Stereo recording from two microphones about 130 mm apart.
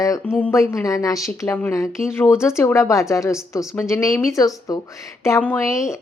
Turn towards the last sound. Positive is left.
turn(degrees=20)  # may be behind; listen again after turning